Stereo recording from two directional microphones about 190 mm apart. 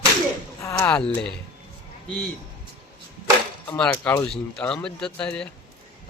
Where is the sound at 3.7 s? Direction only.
5° left (ahead or behind).